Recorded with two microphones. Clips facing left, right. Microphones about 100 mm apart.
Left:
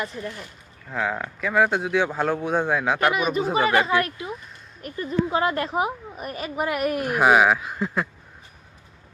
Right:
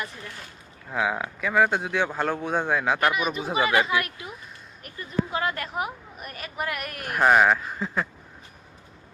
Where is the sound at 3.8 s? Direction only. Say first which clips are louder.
Left 3 dB; 30° left (ahead or behind).